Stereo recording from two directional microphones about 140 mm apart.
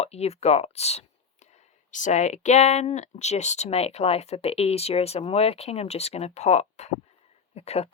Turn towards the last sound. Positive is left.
turn(degrees=50)  # may be behind; listen again after turning